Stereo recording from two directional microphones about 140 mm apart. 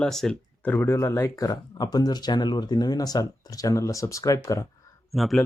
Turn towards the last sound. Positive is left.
turn(degrees=0)  # may be behind; listen again after turning